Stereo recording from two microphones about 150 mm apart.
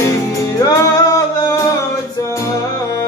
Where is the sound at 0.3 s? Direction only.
20° left (ahead or behind).